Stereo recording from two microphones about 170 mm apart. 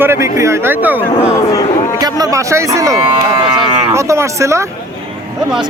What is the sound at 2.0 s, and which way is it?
Speech, 20° right (ahead or behind).